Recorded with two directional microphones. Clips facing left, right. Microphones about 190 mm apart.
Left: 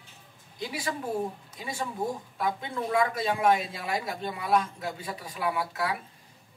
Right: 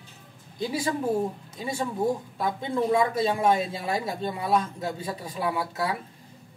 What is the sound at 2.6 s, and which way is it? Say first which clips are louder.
Speech: right 6 dB; 25° right (ahead or behind).